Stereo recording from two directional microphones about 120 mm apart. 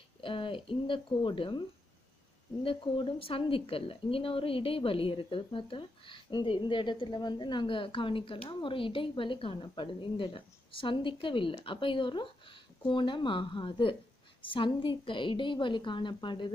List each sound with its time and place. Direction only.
0.2 s a woman's voice: 45° left (ahead or behind)
2.6 s a woman's voice: 45° left (ahead or behind)